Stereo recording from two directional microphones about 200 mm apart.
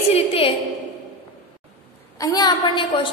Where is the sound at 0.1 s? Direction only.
30° left (ahead or behind).